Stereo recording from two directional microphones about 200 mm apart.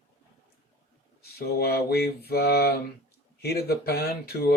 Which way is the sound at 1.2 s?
50° left (ahead or behind).